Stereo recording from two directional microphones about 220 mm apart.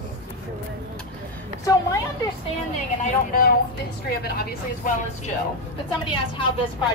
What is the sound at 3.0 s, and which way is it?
Speech, 40° left (ahead or behind).